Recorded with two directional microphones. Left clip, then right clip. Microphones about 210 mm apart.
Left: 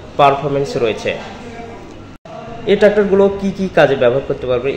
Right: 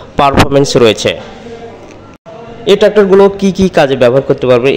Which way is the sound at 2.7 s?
40° right (ahead or behind).